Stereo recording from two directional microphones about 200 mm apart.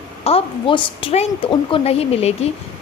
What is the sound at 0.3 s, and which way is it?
Speech, 25° left (ahead or behind).